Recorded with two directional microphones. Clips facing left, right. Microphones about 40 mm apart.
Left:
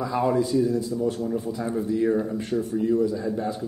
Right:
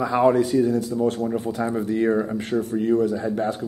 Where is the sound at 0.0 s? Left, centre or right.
Right.